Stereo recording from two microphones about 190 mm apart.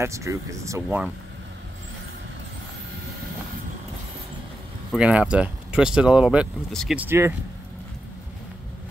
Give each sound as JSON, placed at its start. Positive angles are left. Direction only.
{"t": 0.0, "sound": "speech", "side_deg": -15}
{"t": 4.9, "sound": "speech", "side_deg": -5}
{"t": 7.0, "sound": "speech", "side_deg": -10}